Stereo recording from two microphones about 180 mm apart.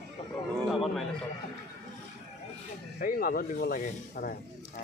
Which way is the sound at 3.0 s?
55° left (ahead or behind).